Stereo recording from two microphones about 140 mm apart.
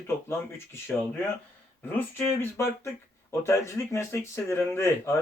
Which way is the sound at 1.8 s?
15° left (ahead or behind).